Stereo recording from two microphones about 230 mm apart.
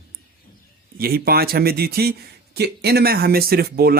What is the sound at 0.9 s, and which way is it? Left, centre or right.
A man's voice, right.